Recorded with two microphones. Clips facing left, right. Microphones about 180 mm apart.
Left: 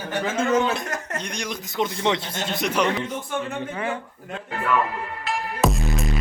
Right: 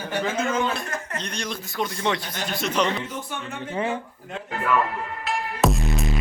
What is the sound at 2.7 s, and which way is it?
Speech, 10° left (ahead or behind).